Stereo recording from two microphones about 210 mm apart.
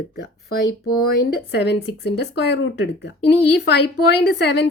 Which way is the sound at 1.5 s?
55° left (ahead or behind).